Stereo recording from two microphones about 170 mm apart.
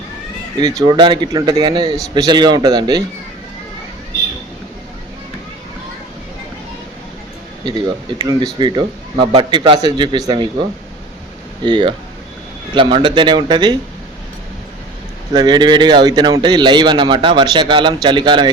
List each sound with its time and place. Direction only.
0.8 s a man's voice: 25° right (ahead or behind)
7.6 s a man's voice: 25° right (ahead or behind)
15.3 s a man's voice: 25° right (ahead or behind)